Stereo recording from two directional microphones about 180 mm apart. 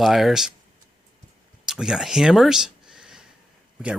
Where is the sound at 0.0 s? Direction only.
Centre (ahead or behind).